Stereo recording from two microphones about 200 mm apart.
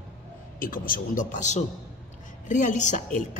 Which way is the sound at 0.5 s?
45° left (ahead or behind).